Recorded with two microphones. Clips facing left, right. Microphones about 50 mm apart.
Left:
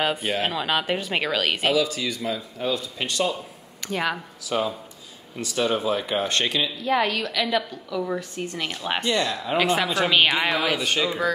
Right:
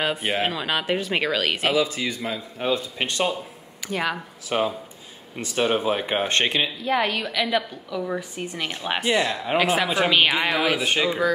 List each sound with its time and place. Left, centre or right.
0.2 s speech: right
0.5 s speech: centre
1.7 s a man's voice: right
3.8 s speech: centre
4.5 s a man's voice: right
6.8 s a woman's voice: centre
10.9 s a woman's voice: centre